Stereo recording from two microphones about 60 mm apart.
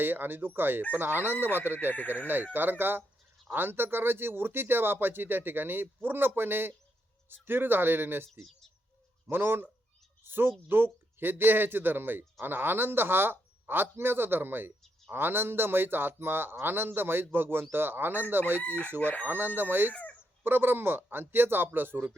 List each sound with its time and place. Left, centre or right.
0.0 s a man's voice: right
1.9 s speech: left
2.2 s a man's voice: right
8.3 s speech: centre
9.2 s a man's voice: right
18.9 s chicken: left
19.3 s a man's voice: right
19.9 s chicken: left
20.4 s a man's voice: right